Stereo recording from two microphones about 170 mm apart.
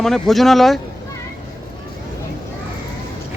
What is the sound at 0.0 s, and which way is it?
Speech, centre (ahead or behind).